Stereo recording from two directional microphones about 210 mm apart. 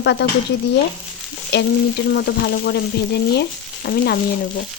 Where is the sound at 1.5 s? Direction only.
55° left (ahead or behind).